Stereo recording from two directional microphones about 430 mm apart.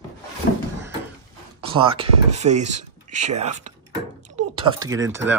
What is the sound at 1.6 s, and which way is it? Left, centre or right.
Speech, centre.